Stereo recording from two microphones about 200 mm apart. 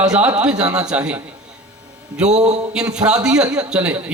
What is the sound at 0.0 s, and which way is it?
A man's voice, 5° right (ahead or behind).